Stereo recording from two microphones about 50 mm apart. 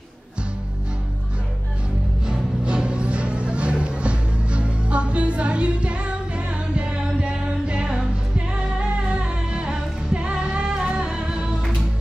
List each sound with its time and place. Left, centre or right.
2.2 s music: centre